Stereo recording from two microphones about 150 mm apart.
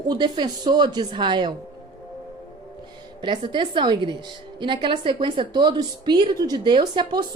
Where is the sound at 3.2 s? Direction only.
30° right (ahead or behind).